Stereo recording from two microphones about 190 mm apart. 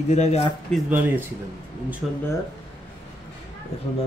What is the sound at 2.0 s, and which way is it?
Speech, 10° right (ahead or behind).